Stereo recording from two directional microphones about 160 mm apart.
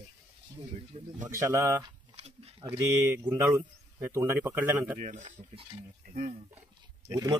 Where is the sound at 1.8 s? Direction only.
40° right (ahead or behind).